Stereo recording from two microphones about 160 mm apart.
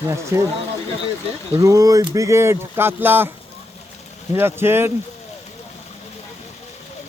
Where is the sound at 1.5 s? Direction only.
20° right (ahead or behind).